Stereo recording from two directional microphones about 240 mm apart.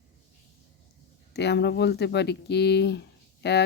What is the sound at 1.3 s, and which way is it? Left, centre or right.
Speech, left.